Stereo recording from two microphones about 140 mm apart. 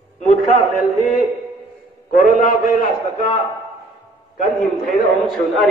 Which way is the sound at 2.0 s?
70° left (ahead or behind).